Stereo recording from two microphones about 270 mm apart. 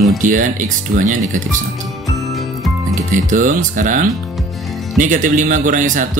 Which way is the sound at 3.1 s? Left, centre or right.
Right.